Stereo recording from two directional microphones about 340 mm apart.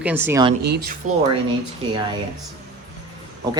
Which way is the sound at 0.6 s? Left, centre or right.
Right.